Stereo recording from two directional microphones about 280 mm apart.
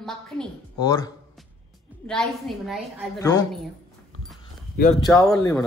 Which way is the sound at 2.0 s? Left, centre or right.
Centre.